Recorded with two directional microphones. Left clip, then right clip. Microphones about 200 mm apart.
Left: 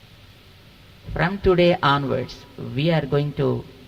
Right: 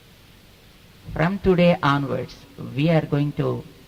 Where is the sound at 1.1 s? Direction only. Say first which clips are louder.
Left 1 dB; 20° left (ahead or behind).